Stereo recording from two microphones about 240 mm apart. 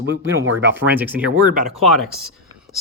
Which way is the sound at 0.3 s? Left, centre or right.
Right.